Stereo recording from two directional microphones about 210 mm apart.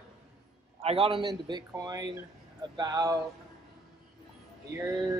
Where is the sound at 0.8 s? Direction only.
25° right (ahead or behind).